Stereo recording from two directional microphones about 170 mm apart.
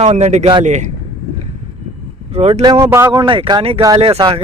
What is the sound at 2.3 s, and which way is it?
Speech, 40° right (ahead or behind).